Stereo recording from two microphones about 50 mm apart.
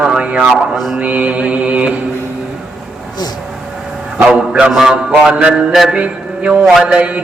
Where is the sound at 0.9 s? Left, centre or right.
Right.